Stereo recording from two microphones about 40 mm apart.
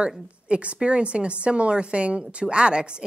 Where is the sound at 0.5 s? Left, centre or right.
Right.